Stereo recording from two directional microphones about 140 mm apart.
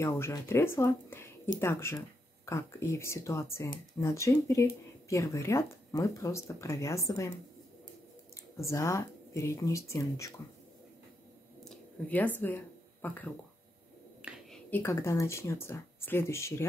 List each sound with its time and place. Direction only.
0.0 s speech: 20° left (ahead or behind)
8.5 s speech: 20° left (ahead or behind)
11.6 s a sound: 10° left (ahead or behind)
14.5 s speech: 15° left (ahead or behind)